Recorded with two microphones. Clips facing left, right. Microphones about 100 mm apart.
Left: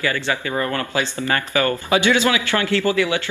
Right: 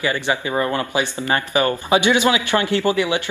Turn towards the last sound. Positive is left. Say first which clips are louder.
# even
turn(degrees=-20)  # may be behind; listen again after turning